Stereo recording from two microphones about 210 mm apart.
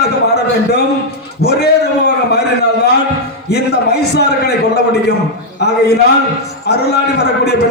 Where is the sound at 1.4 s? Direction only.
50° left (ahead or behind).